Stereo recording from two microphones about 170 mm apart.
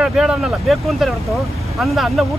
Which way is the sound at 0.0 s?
5° right (ahead or behind).